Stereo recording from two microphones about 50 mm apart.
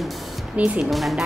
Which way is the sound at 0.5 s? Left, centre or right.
Right.